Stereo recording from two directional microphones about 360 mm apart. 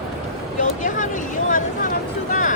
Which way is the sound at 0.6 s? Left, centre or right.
Left.